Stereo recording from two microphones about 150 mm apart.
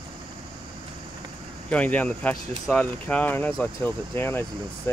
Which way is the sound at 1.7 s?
10° left (ahead or behind).